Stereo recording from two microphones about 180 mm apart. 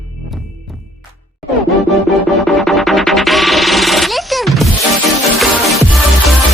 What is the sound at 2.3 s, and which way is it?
Music, centre (ahead or behind).